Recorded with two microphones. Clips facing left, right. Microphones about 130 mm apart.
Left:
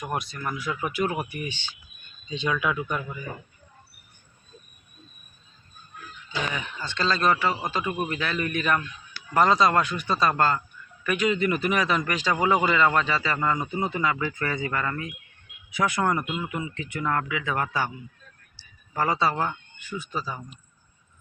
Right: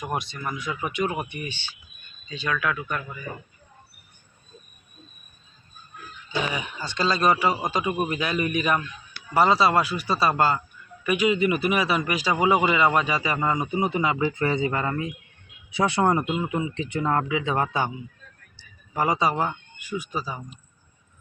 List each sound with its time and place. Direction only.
0.0 s speech: centre (ahead or behind)
2.3 s speech: 15° left (ahead or behind)
6.3 s a man's voice: 10° right (ahead or behind)
18.9 s a man's voice: 15° right (ahead or behind)